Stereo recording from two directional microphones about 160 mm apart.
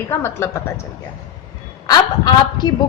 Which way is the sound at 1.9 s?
25° left (ahead or behind).